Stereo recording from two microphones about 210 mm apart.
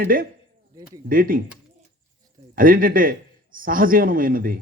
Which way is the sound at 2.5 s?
40° right (ahead or behind).